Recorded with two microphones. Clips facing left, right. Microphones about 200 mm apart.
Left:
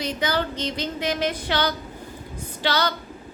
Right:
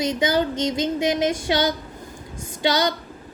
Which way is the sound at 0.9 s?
15° right (ahead or behind).